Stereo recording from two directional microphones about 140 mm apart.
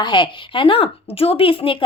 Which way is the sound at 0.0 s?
35° left (ahead or behind).